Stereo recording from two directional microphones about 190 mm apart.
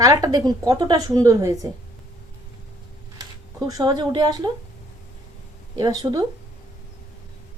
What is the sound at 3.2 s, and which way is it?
Speech, 20° right (ahead or behind).